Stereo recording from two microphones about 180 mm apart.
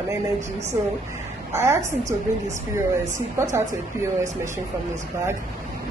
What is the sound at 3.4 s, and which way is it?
Speech, 15° right (ahead or behind).